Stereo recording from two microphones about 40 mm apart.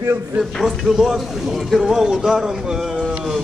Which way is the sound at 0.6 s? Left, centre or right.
Centre.